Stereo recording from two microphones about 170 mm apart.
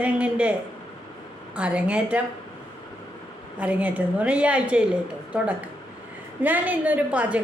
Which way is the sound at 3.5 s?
10° right (ahead or behind).